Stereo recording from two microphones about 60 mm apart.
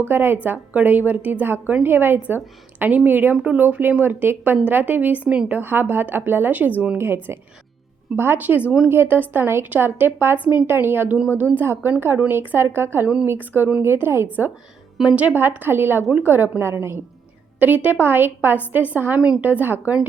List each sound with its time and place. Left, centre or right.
0.1 s a woman's voice: right
0.4 s a woman's voice: right
3.3 s a woman's voice: right
5.5 s a woman's voice: right
7.0 s a woman's voice: right
15.0 s speech: centre
15.4 s a woman's voice: right
17.6 s a woman's voice: right